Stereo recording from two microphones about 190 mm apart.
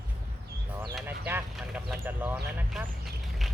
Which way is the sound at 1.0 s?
10° right (ahead or behind).